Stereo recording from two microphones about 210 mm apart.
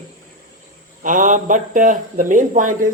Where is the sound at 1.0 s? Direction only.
40° right (ahead or behind).